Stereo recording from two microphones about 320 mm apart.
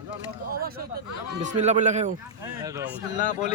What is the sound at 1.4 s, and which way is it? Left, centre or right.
Speech, right.